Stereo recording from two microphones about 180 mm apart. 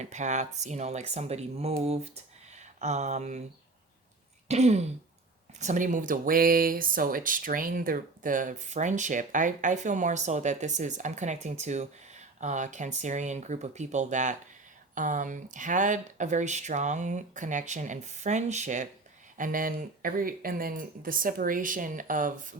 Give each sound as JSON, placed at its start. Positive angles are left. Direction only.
{"t": 0.0, "sound": "speech", "side_deg": -40}
{"t": 4.4, "sound": "throat clearing", "side_deg": -40}
{"t": 5.5, "sound": "speech", "side_deg": -45}